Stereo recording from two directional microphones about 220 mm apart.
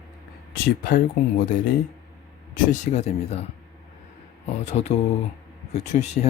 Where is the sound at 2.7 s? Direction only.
30° left (ahead or behind).